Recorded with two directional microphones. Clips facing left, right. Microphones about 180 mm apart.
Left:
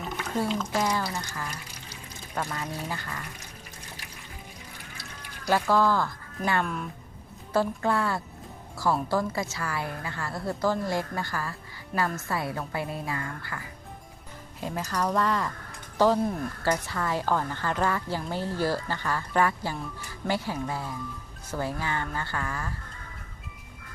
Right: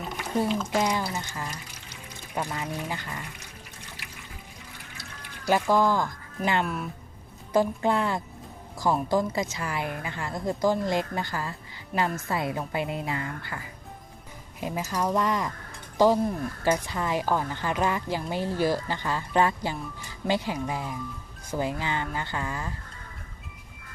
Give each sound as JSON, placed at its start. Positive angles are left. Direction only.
{"t": 0.7, "sound": "a woman's voice", "side_deg": -15}
{"t": 5.5, "sound": "a woman's voice", "side_deg": -15}
{"t": 11.9, "sound": "a woman's voice", "side_deg": -5}
{"t": 12.3, "sound": "a woman's voice", "side_deg": -20}
{"t": 14.6, "sound": "a woman's voice", "side_deg": -10}